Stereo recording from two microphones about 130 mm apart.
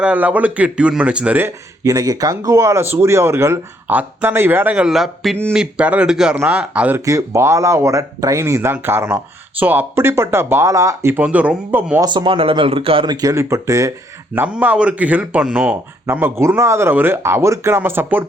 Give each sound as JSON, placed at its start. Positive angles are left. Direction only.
{"t": 0.0, "sound": "speech", "side_deg": -10}
{"t": 7.0, "sound": "speech", "side_deg": -25}
{"t": 11.2, "sound": "speech", "side_deg": -10}
{"t": 11.9, "sound": "speech", "side_deg": -35}
{"t": 13.1, "sound": "speech", "side_deg": -25}
{"t": 14.3, "sound": "speech", "side_deg": -10}